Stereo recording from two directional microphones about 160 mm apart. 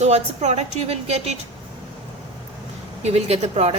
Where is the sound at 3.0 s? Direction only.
40° right (ahead or behind).